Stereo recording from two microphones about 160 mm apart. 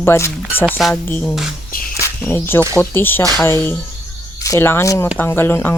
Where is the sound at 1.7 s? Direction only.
65° left (ahead or behind).